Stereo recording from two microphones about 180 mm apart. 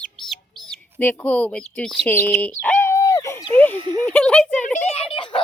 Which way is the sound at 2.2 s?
10° left (ahead or behind).